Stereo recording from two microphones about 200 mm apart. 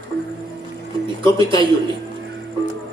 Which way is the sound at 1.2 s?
25° right (ahead or behind).